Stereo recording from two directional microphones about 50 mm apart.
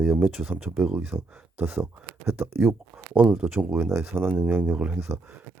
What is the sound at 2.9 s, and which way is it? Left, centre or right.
Speech, right.